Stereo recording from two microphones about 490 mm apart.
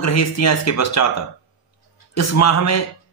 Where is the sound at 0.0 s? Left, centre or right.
Left.